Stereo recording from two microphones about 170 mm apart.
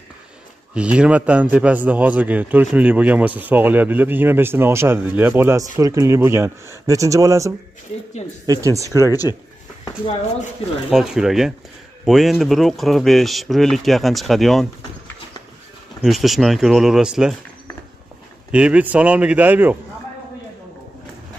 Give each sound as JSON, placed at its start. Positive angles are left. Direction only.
{"t": 0.7, "sound": "a man's voice", "side_deg": -5}
{"t": 10.9, "sound": "speech", "side_deg": -5}
{"t": 16.0, "sound": "speech", "side_deg": 0}
{"t": 18.5, "sound": "a man's voice", "side_deg": -5}